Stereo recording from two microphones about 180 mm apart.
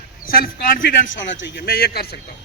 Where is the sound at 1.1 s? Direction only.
90° left; by 2.2 s 60° left (ahead or behind).